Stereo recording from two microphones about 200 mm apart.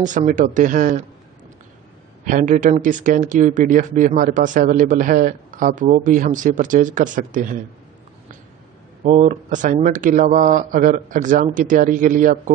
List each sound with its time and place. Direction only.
0.0 s speech: 40° right (ahead or behind)
2.2 s speech: 40° right (ahead or behind)
9.0 s speech: 40° right (ahead or behind)